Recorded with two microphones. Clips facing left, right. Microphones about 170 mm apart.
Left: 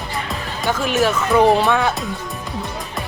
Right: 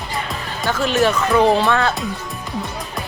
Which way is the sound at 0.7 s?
15° left (ahead or behind).